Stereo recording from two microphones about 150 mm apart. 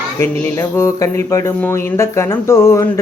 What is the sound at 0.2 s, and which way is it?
Mantra, 15° left (ahead or behind).